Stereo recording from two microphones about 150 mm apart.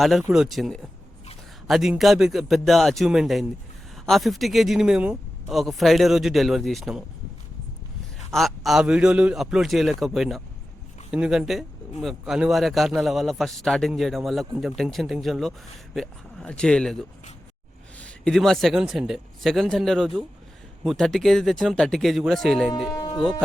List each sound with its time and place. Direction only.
0.0 s speech: centre (ahead or behind)
8.3 s speech: centre (ahead or behind)
22.9 s music: 25° left (ahead or behind)